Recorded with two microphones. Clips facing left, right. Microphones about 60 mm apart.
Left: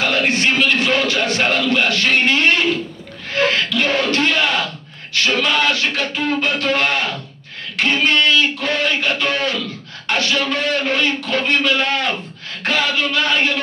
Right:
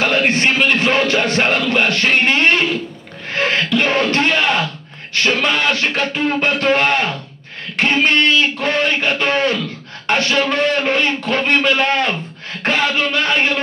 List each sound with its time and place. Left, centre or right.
0.1 s music: right
3.4 s music: right
5.1 s a man's voice: right